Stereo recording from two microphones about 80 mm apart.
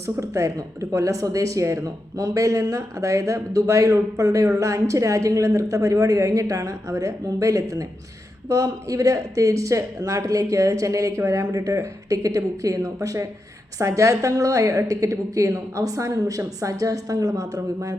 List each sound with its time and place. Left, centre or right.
0.2 s speech: right